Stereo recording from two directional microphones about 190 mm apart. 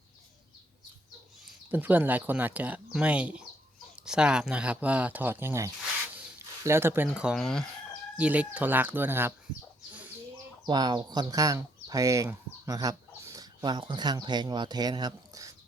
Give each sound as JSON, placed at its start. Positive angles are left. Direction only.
{"t": 1.7, "sound": "speech", "side_deg": -10}
{"t": 10.7, "sound": "speech", "side_deg": -25}